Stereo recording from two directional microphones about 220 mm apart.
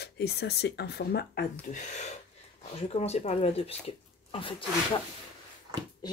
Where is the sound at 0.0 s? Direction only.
45° left (ahead or behind).